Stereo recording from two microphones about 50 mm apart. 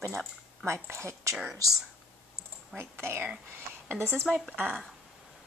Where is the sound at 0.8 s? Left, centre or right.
Right.